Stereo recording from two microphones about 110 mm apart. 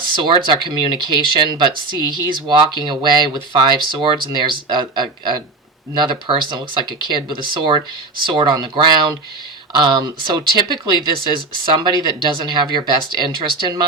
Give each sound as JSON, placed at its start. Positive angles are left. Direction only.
{"t": 0.0, "sound": "speech", "side_deg": -45}